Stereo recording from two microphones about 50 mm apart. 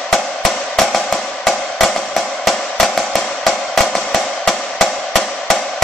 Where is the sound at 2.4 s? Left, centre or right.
Centre.